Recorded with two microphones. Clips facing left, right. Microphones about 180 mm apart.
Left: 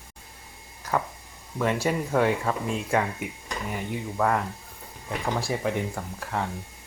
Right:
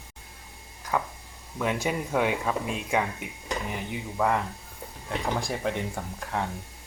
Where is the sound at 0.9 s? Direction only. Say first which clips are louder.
Left 1 dB; 5° right (ahead or behind).